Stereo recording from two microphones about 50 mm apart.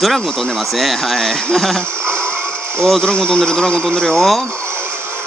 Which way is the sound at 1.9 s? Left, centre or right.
Right.